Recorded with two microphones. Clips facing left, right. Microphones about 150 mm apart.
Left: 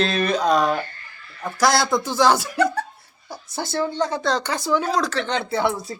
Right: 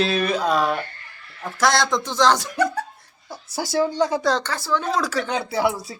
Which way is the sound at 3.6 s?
10° right (ahead or behind).